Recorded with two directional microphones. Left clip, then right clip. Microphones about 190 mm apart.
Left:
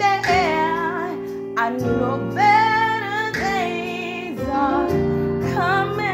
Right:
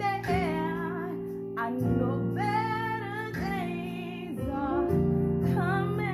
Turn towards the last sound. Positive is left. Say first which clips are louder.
# left 11 dB
turn(degrees=15)  # may be behind; listen again after turning